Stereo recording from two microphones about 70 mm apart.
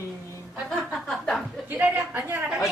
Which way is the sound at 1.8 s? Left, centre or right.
Right.